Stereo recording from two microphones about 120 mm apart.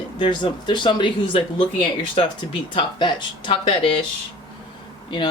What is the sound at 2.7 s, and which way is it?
Speech, 40° left (ahead or behind).